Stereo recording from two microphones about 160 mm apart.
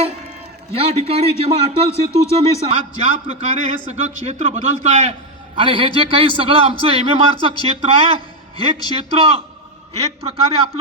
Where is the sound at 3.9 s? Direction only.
45° right (ahead or behind).